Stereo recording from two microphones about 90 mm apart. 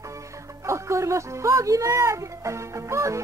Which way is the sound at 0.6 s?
35° right (ahead or behind).